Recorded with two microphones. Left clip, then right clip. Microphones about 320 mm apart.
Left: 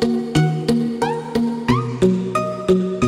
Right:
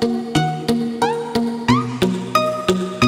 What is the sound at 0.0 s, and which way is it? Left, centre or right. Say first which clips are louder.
Music: even; centre.